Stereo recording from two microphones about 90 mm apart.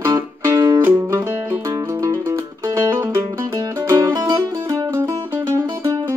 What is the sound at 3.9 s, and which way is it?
Music, 35° right (ahead or behind).